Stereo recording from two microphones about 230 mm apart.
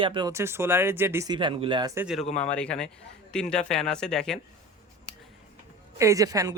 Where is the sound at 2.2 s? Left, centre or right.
Left.